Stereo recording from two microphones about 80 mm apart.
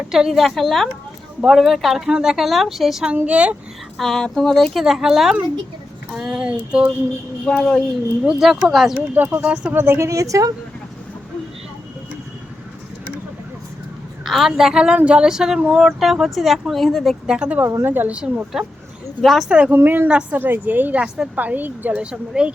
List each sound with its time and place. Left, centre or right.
0.1 s speech: centre
3.2 s a woman's voice: centre
3.9 s a woman's voice: centre
7.4 s speech: centre
8.2 s speech: centre
9.1 s a woman's voice: right
14.3 s a woman's voice: centre
17.2 s a woman's voice: centre
17.8 s a woman's voice: right
18.6 s speech: centre
19.5 s a woman's voice: centre
19.7 s a woman's voice: right; by 22.5 s centre